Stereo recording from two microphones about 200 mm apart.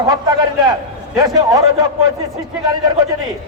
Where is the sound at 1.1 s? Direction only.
20° right (ahead or behind).